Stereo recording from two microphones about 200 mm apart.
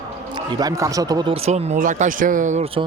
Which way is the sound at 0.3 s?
20° right (ahead or behind).